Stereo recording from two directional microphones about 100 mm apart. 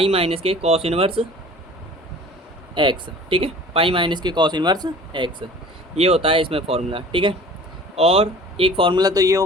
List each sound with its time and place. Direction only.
0.0 s speech: 80° right
2.7 s speech: 55° right (ahead or behind)
6.0 s speech: 90° right; by 7.3 s 60° right (ahead or behind)
7.9 s speech: 75° right (ahead or behind); by 9.0 s 60° right (ahead or behind)
9.0 s speech: 40° right (ahead or behind)